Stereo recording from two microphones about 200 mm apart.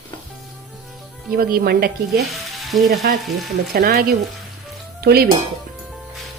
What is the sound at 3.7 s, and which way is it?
A woman's voice, 50° right (ahead or behind).